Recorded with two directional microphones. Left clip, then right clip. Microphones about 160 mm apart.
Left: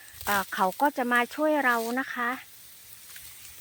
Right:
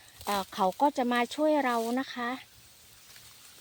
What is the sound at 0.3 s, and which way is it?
Speech, 5° right (ahead or behind).